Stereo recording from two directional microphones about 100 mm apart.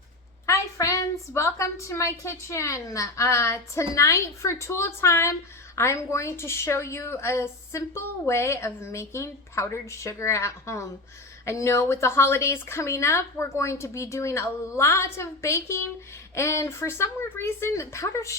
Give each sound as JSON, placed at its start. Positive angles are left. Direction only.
{"t": 0.4, "sound": "a woman's voice", "side_deg": 30}